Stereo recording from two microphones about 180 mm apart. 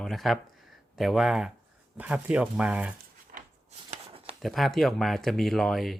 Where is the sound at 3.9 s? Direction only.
30° right (ahead or behind).